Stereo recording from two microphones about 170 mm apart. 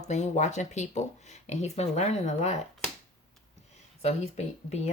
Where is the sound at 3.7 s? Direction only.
40° left (ahead or behind).